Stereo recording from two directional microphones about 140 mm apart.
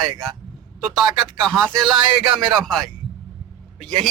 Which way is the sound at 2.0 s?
35° right (ahead or behind).